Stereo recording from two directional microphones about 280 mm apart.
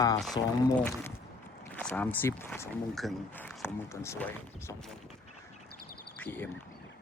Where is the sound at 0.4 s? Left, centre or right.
Centre.